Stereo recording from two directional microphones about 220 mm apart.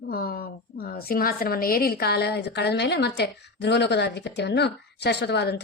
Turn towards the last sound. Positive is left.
turn(degrees=50)  # may be behind; listen again after turning